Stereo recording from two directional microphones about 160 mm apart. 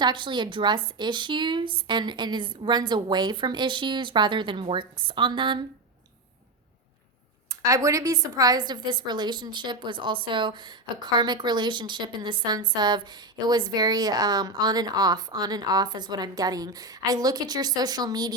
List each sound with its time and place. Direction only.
0.0 s speech: 30° right (ahead or behind)
7.6 s speech: 20° right (ahead or behind)